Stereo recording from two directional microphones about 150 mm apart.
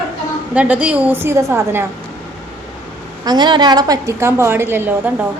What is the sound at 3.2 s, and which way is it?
A woman's voice, 30° right (ahead or behind).